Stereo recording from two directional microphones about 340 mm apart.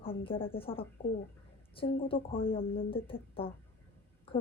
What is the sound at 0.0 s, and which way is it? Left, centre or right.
A woman's voice, centre.